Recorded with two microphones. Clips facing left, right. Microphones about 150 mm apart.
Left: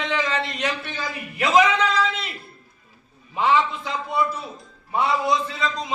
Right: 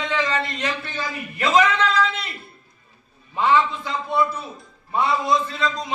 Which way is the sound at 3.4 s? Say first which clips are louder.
Right 1 dB; 15° left (ahead or behind).